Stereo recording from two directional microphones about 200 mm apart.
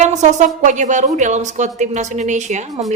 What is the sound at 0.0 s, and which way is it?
A woman's voice, 35° right (ahead or behind).